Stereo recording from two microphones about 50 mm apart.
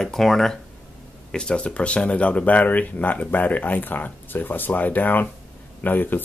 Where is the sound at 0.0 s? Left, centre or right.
Centre.